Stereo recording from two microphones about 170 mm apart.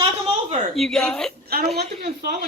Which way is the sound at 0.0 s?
35° right (ahead or behind).